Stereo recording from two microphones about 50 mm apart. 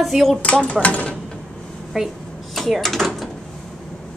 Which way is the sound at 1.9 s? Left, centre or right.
Centre.